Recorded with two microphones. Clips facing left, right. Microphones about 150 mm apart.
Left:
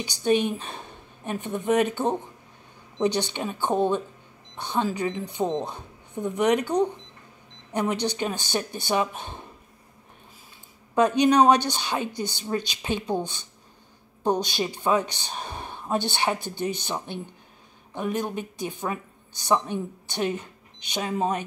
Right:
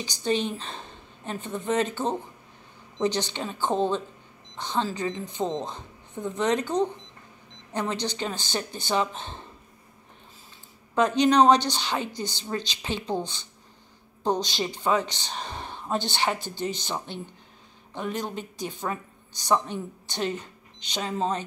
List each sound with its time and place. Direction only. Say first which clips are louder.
0.2 s speech: left 4 dB; 15° left (ahead or behind)
11.0 s speech: left 1 dB; 15° left (ahead or behind)